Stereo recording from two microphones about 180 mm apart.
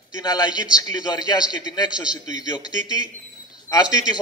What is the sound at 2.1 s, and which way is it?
A man's voice, 20° left (ahead or behind).